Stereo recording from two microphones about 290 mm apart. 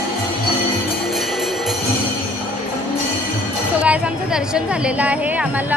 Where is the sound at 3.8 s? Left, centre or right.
Centre.